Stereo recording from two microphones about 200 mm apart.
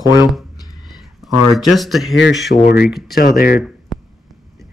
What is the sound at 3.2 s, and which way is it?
Speech, 50° left (ahead or behind).